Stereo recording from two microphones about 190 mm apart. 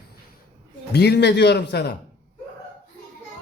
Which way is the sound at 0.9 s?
60° left (ahead or behind).